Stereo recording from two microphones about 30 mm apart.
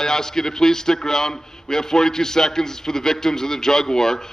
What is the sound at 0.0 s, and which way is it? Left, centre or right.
A man's voice, centre.